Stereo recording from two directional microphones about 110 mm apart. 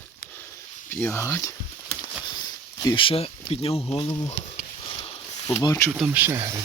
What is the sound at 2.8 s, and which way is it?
Speech, 50° left (ahead or behind).